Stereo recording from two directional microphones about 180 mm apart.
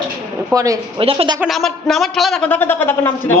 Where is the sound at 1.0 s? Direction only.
30° right (ahead or behind).